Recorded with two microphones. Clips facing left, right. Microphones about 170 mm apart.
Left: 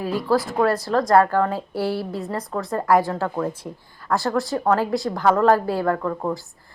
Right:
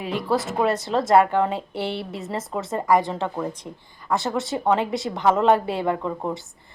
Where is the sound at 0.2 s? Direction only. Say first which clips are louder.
Left 2 dB; 20° right (ahead or behind).